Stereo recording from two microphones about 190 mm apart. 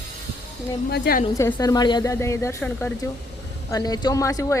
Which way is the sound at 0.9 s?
55° left (ahead or behind).